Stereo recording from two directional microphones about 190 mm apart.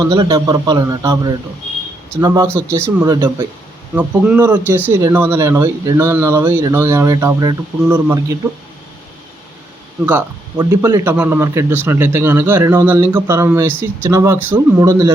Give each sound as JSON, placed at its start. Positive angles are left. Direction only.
{"t": 0.0, "sound": "a man's voice", "side_deg": -20}
{"t": 10.6, "sound": "speech", "side_deg": -15}